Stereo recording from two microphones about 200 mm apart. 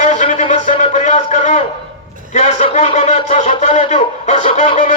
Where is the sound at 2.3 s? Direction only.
35° left (ahead or behind).